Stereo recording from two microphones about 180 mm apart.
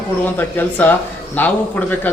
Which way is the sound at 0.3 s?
10° left (ahead or behind).